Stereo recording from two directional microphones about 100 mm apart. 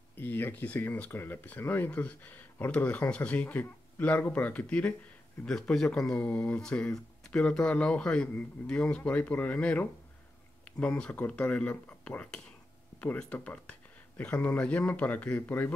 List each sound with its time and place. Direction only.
0.1 s speech: 20° left (ahead or behind)